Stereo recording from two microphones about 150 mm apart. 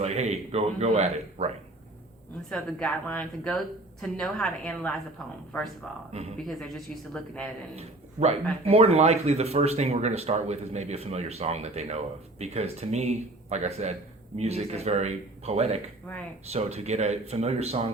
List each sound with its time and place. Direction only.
0.0 s speech: 45° right (ahead or behind)
2.5 s a woman's voice: centre (ahead or behind)
6.3 s a woman's voice: centre (ahead or behind)
7.8 s a man's voice: 45° right (ahead or behind)